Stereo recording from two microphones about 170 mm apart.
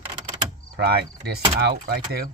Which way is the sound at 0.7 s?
70° right (ahead or behind).